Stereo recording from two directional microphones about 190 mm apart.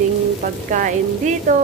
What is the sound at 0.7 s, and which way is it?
Speech, 45° right (ahead or behind).